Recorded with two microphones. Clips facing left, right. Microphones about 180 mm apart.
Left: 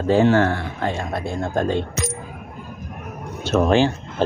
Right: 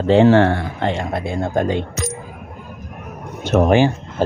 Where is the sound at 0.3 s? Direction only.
30° right (ahead or behind).